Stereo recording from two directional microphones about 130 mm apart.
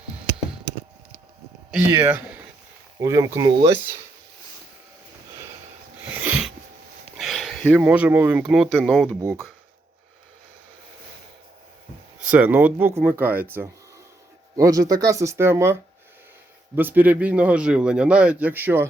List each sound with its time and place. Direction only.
2.0 s speech: 15° right (ahead or behind)
6.0 s a sound: 15° right (ahead or behind)
7.2 s a sound: centre (ahead or behind)
7.7 s a man's voice: 10° right (ahead or behind)
12.2 s a man's voice: 10° right (ahead or behind)
14.5 s a man's voice: 25° right (ahead or behind)